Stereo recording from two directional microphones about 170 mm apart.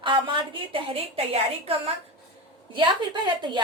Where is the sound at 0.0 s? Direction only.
30° right (ahead or behind).